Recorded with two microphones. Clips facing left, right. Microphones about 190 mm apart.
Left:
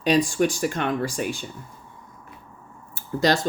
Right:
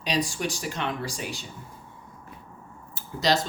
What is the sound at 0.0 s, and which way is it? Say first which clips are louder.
Speech: left 8 dB; 50° left (ahead or behind).